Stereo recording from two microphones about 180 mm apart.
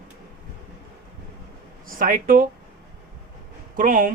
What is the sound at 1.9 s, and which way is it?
Speech, 50° right (ahead or behind).